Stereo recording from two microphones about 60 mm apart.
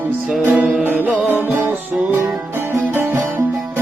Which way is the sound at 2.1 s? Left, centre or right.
Right.